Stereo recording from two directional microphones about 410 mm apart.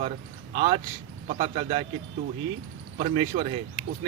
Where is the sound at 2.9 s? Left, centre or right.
Centre.